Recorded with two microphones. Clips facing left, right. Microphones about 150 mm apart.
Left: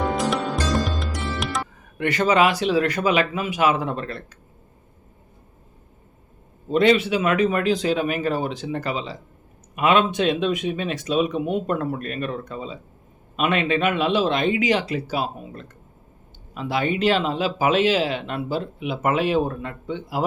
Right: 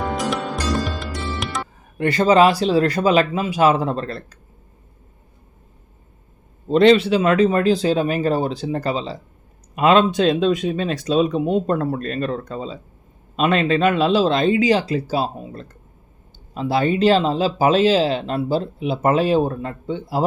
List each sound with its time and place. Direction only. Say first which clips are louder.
0.0 s music: even; centre (ahead or behind)
2.0 s speech: right 4 dB; 30° right (ahead or behind)
7.1 s speech: right 4 dB; 30° right (ahead or behind)